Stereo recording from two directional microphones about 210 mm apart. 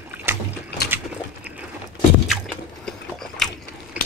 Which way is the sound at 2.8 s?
Centre (ahead or behind).